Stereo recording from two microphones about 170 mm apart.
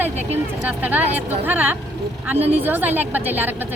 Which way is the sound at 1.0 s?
40° right (ahead or behind).